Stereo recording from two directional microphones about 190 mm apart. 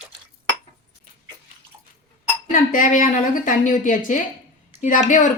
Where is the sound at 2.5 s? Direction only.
45° left (ahead or behind).